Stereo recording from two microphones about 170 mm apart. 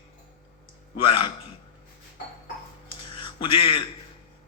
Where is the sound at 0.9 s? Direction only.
30° left (ahead or behind).